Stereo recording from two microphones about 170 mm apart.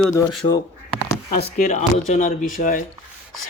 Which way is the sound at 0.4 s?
30° left (ahead or behind).